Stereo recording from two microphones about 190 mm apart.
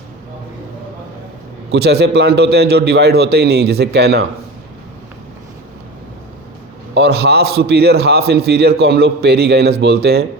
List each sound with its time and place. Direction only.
1.7 s a man's voice: 60° right (ahead or behind)
6.9 s a man's voice: 60° right (ahead or behind)